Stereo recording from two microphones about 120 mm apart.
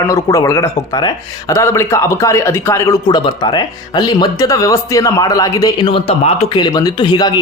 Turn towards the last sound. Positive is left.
turn(degrees=35)  # may be behind; listen again after turning